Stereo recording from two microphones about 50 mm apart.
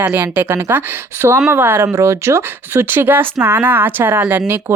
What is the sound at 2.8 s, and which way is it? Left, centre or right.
Speech, right.